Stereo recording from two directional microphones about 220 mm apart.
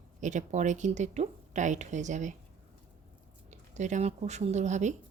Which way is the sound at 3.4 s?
30° right (ahead or behind).